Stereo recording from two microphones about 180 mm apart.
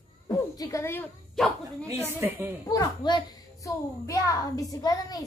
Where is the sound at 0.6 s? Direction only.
15° left (ahead or behind).